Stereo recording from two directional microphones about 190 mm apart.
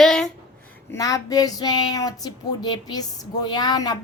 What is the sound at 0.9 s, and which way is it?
Child singing, 15° left (ahead or behind).